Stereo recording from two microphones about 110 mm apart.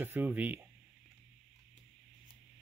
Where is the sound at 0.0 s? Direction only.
15° right (ahead or behind).